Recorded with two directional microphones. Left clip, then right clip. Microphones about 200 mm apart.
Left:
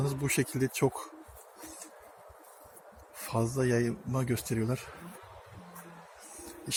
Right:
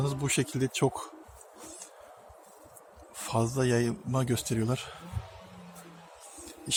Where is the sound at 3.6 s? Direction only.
5° right (ahead or behind).